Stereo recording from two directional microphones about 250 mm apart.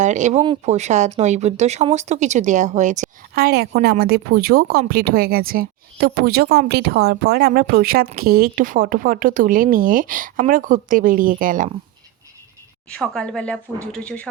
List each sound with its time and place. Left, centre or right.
0.0 s speech: right
12.9 s a woman's voice: centre